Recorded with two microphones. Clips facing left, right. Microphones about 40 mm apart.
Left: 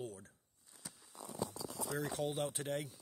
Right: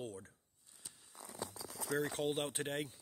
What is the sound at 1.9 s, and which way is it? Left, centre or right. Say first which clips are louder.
Speech: right 3 dB; right.